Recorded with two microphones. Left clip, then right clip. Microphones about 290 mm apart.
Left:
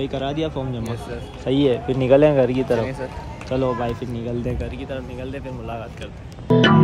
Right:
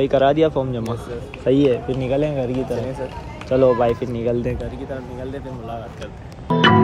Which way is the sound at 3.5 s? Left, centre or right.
Centre.